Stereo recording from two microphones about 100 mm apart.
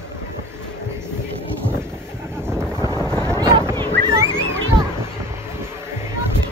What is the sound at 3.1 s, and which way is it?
Boat, 10° left (ahead or behind).